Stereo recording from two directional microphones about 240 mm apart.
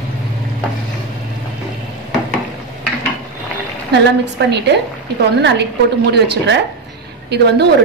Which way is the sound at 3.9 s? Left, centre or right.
Right.